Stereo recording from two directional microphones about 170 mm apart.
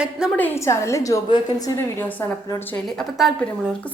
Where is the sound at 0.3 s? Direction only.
15° left (ahead or behind).